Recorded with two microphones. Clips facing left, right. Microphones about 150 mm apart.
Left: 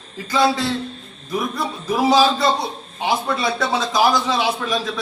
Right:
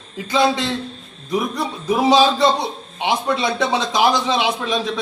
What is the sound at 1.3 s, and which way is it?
A man's voice, 20° right (ahead or behind).